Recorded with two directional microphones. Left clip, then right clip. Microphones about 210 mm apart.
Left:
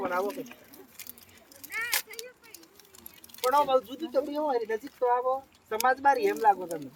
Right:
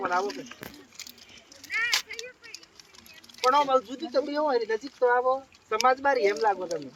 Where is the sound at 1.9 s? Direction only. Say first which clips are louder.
Right 4 dB; 10° left (ahead or behind).